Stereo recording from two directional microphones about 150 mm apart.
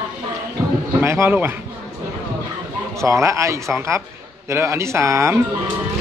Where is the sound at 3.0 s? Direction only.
20° right (ahead or behind).